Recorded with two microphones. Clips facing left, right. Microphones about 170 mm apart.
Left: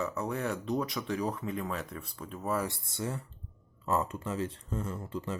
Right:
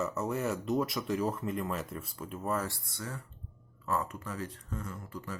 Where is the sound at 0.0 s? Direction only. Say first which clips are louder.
Right 1 dB; centre (ahead or behind).